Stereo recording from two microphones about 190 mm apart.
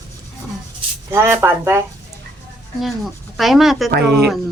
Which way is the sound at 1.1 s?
15° right (ahead or behind).